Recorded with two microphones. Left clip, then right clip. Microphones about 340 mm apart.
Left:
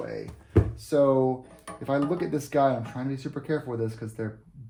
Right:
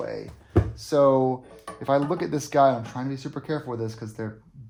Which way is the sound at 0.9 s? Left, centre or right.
Centre.